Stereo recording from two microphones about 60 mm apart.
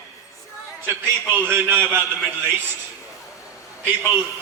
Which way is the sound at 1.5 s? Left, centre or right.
Right.